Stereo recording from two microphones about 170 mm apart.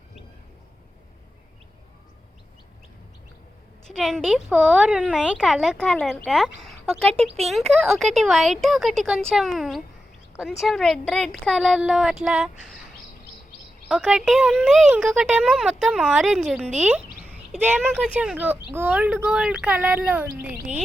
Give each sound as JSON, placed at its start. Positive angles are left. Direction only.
{"t": 3.8, "sound": "speech", "side_deg": 0}
{"t": 7.1, "sound": "speech", "side_deg": -35}
{"t": 7.4, "sound": "speech", "side_deg": 0}
{"t": 13.8, "sound": "speech", "side_deg": -5}